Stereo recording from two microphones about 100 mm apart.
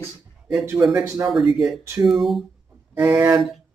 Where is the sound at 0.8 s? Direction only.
30° right (ahead or behind).